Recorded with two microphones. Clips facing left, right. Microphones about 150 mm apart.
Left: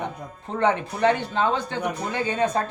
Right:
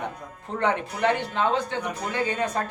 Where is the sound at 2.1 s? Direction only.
25° left (ahead or behind).